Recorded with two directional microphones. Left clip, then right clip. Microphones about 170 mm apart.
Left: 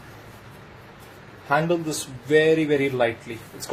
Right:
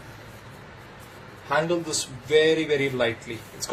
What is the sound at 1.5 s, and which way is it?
Speech, 45° left (ahead or behind).